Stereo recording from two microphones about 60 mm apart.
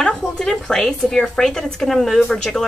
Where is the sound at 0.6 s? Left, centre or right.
Centre.